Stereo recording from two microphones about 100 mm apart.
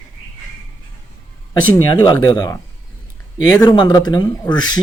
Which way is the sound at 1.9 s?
45° left (ahead or behind).